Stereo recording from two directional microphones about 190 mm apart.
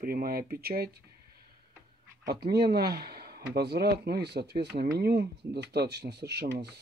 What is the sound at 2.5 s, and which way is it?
Speech, 55° right (ahead or behind).